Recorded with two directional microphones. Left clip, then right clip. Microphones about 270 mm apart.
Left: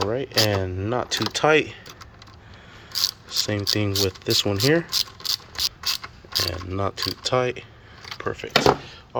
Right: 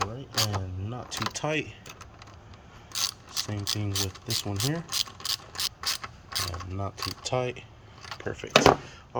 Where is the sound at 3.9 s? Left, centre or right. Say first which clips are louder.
Left 9 dB; right.